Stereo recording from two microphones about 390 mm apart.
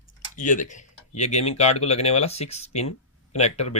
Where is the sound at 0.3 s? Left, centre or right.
Centre.